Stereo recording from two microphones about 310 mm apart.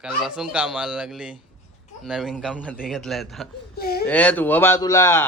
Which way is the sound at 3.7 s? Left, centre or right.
Left.